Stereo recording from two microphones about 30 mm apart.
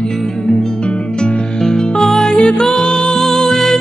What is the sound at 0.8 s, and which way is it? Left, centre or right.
Music, left.